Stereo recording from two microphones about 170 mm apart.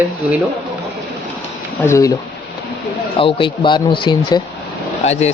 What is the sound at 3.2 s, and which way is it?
A man's voice, 30° left (ahead or behind).